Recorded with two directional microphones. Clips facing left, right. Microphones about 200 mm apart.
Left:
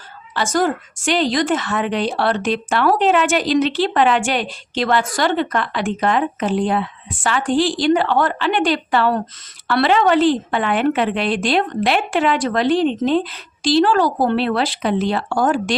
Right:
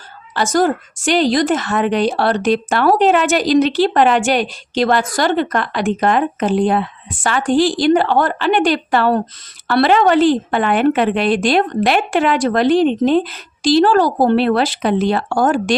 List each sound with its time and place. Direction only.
0.3 s a woman's voice: 40° right (ahead or behind)